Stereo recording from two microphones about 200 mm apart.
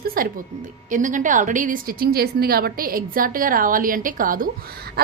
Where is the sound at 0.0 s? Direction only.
45° right (ahead or behind).